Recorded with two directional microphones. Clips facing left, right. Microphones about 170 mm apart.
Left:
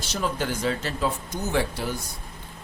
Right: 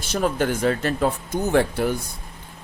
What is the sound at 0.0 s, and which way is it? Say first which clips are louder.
Speech: right 6 dB; 50° right (ahead or behind).